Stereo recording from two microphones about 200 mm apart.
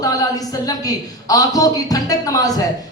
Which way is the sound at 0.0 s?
15° left (ahead or behind).